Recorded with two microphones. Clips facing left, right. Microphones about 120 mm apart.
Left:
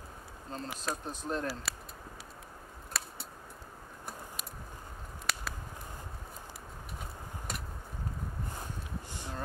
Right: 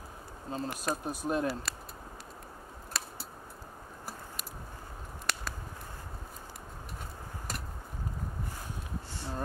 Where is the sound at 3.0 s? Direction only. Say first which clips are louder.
Even; centre (ahead or behind).